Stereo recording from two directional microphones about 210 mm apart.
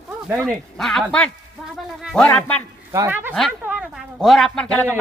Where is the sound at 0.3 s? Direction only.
10° right (ahead or behind).